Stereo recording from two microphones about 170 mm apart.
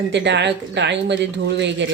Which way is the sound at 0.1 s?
90° right.